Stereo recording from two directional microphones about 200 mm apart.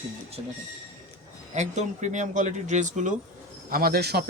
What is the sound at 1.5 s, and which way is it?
Speech, 35° right (ahead or behind).